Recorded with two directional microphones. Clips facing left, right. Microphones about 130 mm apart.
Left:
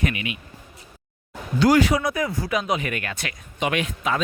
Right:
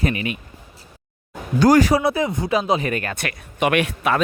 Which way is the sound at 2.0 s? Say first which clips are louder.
Right 4 dB; 25° right (ahead or behind).